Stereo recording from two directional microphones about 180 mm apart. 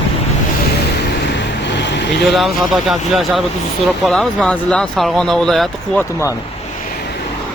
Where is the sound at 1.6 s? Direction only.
75° left (ahead or behind).